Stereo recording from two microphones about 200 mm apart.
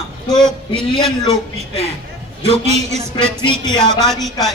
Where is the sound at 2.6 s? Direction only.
30° right (ahead or behind).